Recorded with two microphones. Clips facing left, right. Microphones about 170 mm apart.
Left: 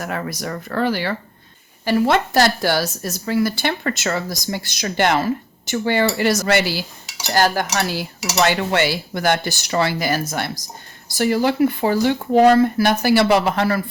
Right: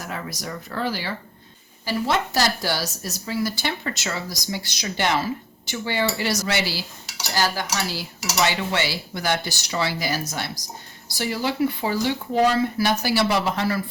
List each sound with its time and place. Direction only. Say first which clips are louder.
0.0 s a woman's voice: left 6 dB; 55° left (ahead or behind)
7.3 s dishes: left 6 dB; 55° left (ahead or behind)